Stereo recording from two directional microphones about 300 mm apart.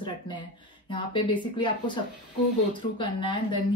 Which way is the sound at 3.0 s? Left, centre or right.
Centre.